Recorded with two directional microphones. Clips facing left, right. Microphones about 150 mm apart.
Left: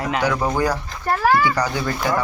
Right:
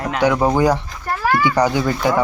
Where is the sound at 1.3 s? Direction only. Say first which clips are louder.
Even; 10° left (ahead or behind).